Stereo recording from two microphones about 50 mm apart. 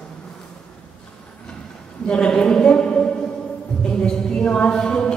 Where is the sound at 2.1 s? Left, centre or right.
Centre.